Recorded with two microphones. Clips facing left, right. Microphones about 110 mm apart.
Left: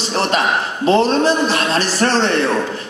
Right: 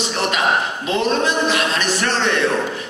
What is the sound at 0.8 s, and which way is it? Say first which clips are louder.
A man's voice: left 7 dB; 35° left (ahead or behind).